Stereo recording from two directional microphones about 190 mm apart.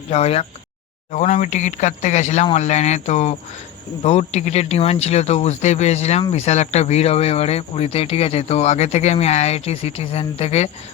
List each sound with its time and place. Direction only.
0.1 s speech: 30° left (ahead or behind)